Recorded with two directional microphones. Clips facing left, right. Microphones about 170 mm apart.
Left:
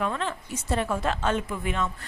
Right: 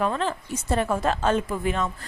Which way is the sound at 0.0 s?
35° right (ahead or behind).